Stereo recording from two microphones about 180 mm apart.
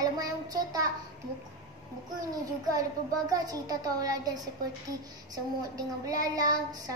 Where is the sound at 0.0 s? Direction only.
20° right (ahead or behind).